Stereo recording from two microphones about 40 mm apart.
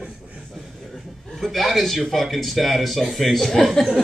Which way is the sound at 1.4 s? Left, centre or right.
Centre.